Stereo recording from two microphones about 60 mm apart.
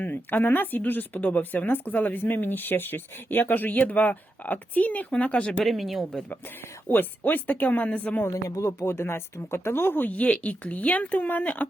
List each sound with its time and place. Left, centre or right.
0.0 s speech: left
5.6 s speech: centre
6.8 s speech: left
8.6 s speech: left